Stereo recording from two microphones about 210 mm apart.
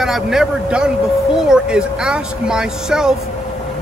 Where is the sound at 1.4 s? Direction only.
5° right (ahead or behind).